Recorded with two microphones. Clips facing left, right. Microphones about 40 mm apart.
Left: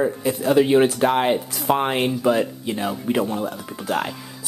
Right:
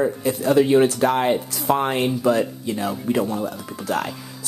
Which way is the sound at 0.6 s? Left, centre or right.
Left.